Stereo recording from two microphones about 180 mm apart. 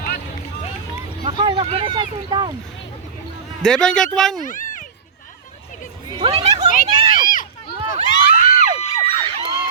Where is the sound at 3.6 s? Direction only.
5° left (ahead or behind).